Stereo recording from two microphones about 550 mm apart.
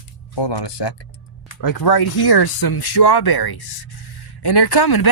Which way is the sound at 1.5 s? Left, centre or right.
Left.